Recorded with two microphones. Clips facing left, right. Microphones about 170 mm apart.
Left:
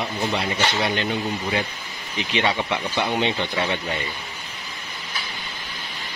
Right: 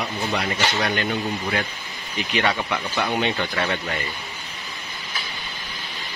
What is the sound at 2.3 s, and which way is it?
Speech, 25° left (ahead or behind).